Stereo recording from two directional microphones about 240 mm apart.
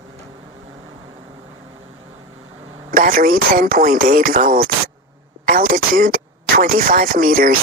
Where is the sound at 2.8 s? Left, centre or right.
Right.